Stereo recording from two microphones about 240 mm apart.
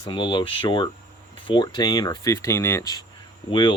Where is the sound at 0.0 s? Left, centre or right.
Centre.